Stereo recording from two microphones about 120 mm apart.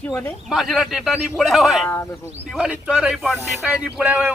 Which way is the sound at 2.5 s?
10° right (ahead or behind).